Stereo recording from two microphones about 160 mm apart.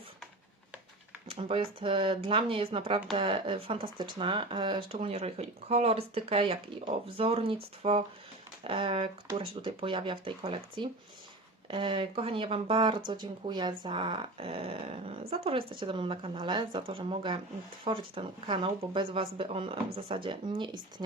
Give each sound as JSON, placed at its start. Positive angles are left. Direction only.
{"t": 1.3, "sound": "speech", "side_deg": -35}